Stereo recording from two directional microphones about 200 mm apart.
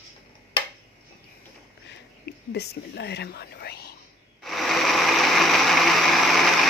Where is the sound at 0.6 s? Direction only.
25° left (ahead or behind).